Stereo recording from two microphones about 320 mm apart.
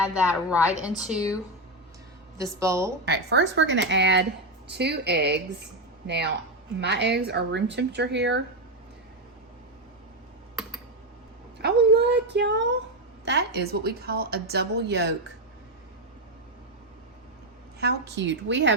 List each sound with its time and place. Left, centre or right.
0.2 s a woman's voice: centre
2.4 s a woman's voice: centre
3.1 s a woman's voice: right
11.6 s a woman's voice: right
17.7 s a woman's voice: right